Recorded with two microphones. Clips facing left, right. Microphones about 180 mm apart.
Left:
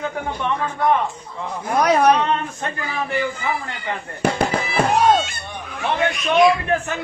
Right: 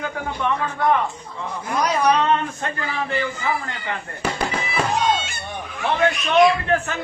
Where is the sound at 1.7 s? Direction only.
60° left (ahead or behind).